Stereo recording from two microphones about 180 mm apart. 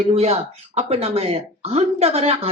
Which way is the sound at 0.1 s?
35° right (ahead or behind).